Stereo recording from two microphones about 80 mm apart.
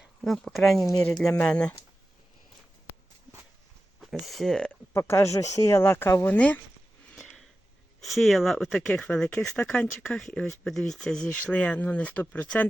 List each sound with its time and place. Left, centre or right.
0.0 s speech: centre
1.4 s speech: centre
4.0 s speech: centre
4.9 s speech: left
5.8 s speech: left
6.2 s speech: centre
7.2 s a sound: centre
8.0 s speech: centre
11.5 s speech: centre